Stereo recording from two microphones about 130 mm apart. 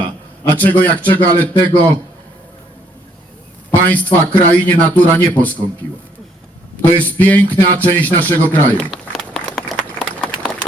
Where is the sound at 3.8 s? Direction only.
10° left (ahead or behind).